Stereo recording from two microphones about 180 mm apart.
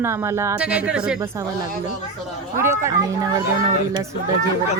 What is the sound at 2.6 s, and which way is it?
Speech, 15° right (ahead or behind).